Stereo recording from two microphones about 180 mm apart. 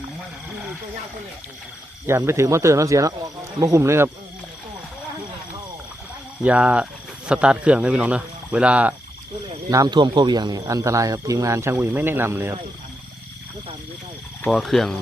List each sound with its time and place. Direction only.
2.0 s speech: 15° right (ahead or behind)
6.4 s speech: 5° right (ahead or behind)
9.6 s speech: 20° right (ahead or behind)
14.5 s speech: centre (ahead or behind)